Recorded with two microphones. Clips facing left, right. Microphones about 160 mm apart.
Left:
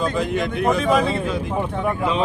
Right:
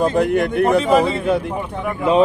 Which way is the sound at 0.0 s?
60° right (ahead or behind).